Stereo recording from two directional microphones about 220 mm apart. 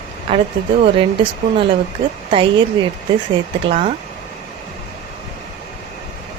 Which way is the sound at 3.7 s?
30° right (ahead or behind).